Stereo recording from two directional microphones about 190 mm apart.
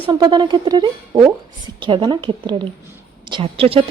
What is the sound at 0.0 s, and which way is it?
Speech, 25° right (ahead or behind).